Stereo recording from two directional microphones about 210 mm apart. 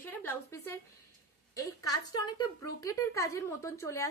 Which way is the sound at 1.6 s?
15° left (ahead or behind).